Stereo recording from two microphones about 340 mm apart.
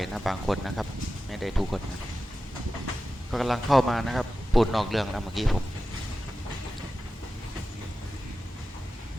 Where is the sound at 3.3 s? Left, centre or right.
Centre.